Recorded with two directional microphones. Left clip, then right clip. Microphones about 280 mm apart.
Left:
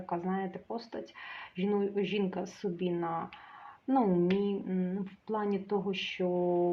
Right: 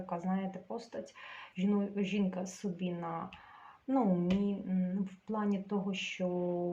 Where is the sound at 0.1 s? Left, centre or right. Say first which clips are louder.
Left 4 dB; left.